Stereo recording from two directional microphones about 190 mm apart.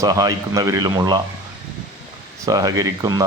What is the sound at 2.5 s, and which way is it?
Speech, 20° right (ahead or behind).